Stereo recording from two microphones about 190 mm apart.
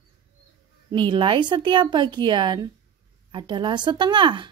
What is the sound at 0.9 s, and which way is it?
Speech, 25° right (ahead or behind).